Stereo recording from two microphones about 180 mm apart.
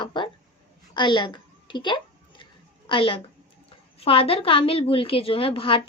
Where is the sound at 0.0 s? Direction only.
25° left (ahead or behind).